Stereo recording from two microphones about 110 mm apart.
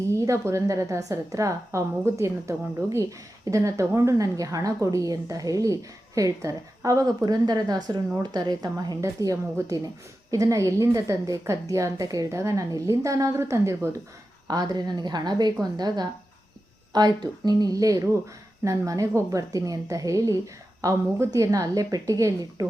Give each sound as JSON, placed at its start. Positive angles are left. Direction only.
{"t": 0.2, "sound": "a woman's voice", "side_deg": -25}
{"t": 14.4, "sound": "a woman's voice", "side_deg": -35}
{"t": 16.9, "sound": "a woman's voice", "side_deg": -40}